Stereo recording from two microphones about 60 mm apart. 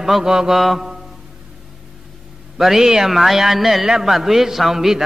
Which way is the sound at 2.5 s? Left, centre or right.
Centre.